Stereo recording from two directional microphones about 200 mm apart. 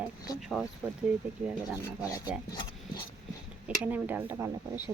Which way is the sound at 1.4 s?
5° right (ahead or behind).